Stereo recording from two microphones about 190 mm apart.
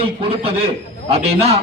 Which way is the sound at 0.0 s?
30° right (ahead or behind).